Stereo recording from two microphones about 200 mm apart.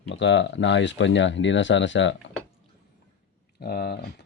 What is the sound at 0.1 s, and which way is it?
Speech, 65° left (ahead or behind).